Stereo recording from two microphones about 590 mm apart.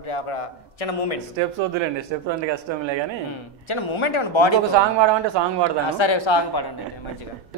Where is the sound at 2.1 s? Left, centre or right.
Right.